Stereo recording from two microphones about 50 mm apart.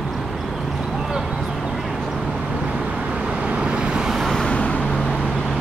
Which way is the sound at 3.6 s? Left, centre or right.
Centre.